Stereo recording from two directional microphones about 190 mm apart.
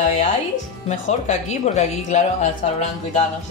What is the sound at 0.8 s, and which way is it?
Speech, 35° left (ahead or behind).